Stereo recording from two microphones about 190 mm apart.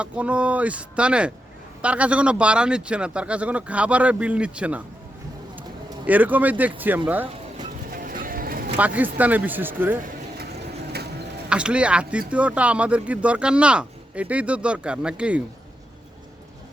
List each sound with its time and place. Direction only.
0.0 s speech: 5° right (ahead or behind)
6.1 s speech: 10° right (ahead or behind)
7.9 s a sound: 50° right (ahead or behind)
9.0 s speech: 10° right (ahead or behind)
11.4 s speech: 5° right (ahead or behind)